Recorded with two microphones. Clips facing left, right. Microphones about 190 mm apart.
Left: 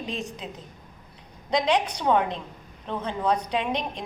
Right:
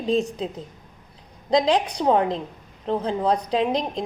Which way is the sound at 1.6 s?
30° right (ahead or behind).